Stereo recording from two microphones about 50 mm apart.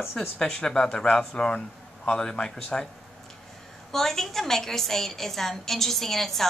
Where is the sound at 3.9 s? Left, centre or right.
Centre.